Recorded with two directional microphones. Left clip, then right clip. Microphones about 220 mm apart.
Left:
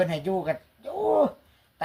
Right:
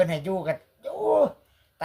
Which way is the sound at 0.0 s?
50° right (ahead or behind).